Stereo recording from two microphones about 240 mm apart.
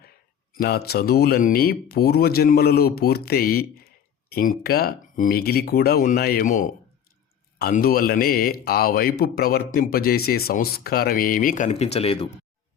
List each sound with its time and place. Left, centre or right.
0.5 s speech: left